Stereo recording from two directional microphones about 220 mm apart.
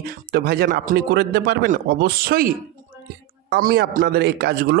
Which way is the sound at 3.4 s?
45° right (ahead or behind).